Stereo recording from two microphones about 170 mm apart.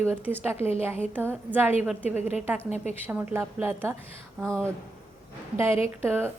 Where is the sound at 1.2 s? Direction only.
10° right (ahead or behind).